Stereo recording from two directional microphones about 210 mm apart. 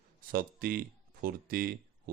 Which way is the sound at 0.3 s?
45° right (ahead or behind).